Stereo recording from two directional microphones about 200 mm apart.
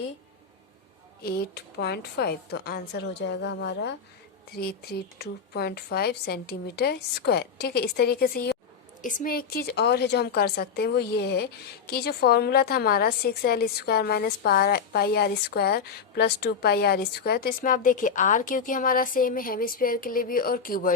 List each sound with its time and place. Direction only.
1.2 s a woman's voice: 55° left (ahead or behind)